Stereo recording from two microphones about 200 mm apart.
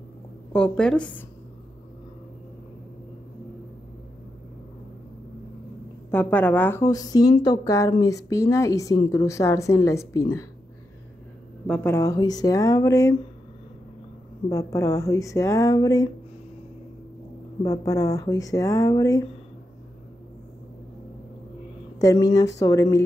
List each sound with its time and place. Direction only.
0.5 s a woman's voice: 5° left (ahead or behind)
6.1 s speech: 10° left (ahead or behind)
11.6 s speech: 5° left (ahead or behind)
14.5 s speech: 15° left (ahead or behind)
17.6 s speech: 15° left (ahead or behind)
21.9 s speech: 15° left (ahead or behind)